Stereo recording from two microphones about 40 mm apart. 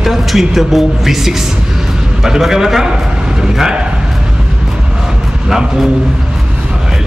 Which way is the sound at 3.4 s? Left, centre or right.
Centre.